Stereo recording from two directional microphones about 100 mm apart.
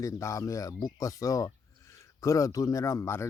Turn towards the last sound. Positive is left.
turn(degrees=25)  # may be behind; listen again after turning